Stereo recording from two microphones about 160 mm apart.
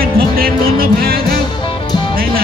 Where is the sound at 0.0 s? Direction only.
70° right (ahead or behind).